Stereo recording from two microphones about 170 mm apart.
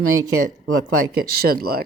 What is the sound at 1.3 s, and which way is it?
Speech, 60° right (ahead or behind).